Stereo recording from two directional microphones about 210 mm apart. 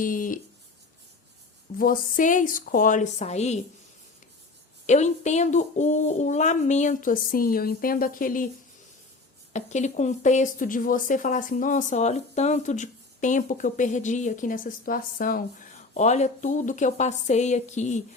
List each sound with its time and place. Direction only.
0.0 s speech: 40° left (ahead or behind)
1.8 s speech: 40° left (ahead or behind)
4.9 s speech: 35° left (ahead or behind)
9.5 s speech: 35° left (ahead or behind)